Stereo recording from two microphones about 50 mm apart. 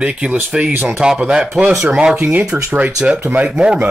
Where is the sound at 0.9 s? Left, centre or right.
Centre.